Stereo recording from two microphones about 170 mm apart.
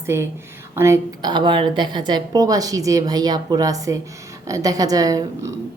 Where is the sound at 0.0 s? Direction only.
15° right (ahead or behind).